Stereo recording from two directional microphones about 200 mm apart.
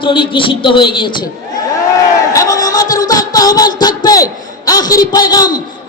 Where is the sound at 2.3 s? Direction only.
15° left (ahead or behind).